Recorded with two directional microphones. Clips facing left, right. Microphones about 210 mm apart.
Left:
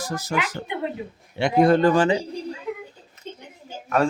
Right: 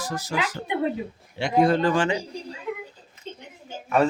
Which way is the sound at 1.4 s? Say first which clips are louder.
Left 3 dB; 55° left (ahead or behind).